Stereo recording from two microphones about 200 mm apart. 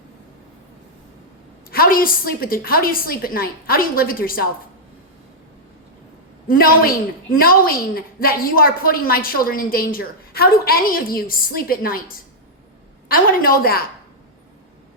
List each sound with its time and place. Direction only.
1.7 s a woman's voice: 45° left (ahead or behind)
6.5 s a woman's voice: 45° left (ahead or behind)
13.1 s a woman's voice: 45° left (ahead or behind)